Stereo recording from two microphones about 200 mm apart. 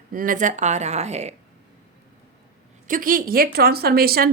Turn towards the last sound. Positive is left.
turn(degrees=-50)  # may be behind; listen again after turning